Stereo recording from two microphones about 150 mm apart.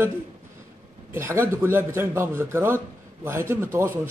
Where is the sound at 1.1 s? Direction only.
15° right (ahead or behind).